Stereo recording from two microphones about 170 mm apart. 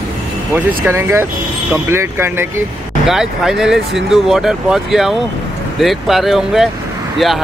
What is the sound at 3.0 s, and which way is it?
Speech, centre (ahead or behind).